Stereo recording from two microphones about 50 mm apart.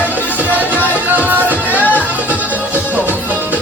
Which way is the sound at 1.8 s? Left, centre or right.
Left.